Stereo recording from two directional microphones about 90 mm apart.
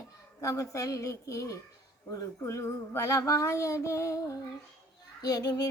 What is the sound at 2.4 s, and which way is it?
Child singing, 35° left (ahead or behind).